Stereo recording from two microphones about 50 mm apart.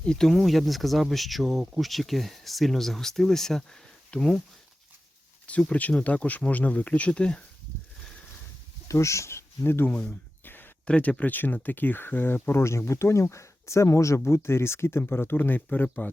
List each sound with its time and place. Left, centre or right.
0.0 s speech: centre
0.3 s speech: centre
5.5 s speech: left
8.9 s speech: left
9.9 s a sound: left
10.8 s speech: left
11.2 s speech: left